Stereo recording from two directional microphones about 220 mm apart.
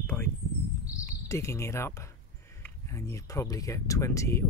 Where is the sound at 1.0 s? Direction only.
15° left (ahead or behind).